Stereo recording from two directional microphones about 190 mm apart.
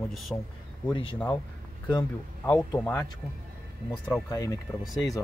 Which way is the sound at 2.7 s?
10° left (ahead or behind).